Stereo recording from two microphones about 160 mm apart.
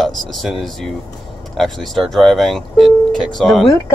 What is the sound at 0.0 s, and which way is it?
Speech, centre (ahead or behind).